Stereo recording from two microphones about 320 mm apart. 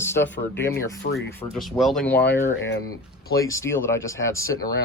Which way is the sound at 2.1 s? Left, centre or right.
Left.